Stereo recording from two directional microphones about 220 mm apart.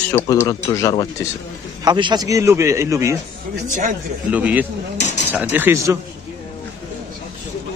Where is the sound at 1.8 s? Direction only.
20° right (ahead or behind).